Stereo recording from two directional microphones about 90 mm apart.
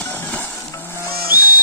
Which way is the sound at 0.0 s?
20° left (ahead or behind).